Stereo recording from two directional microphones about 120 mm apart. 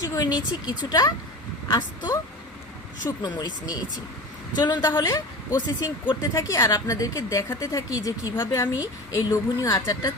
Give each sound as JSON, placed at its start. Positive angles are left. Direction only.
{"t": 0.0, "sound": "vehicle", "side_deg": 30}
{"t": 0.3, "sound": "speech", "side_deg": 35}
{"t": 4.9, "sound": "a woman's voice", "side_deg": 20}
{"t": 5.5, "sound": "speech", "side_deg": 40}
{"t": 6.3, "sound": "a woman's voice", "side_deg": 25}